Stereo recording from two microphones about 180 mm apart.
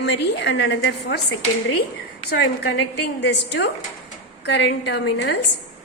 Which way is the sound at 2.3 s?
70° left (ahead or behind).